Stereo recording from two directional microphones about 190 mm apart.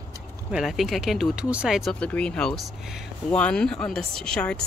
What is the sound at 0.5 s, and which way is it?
Speech, 5° right (ahead or behind).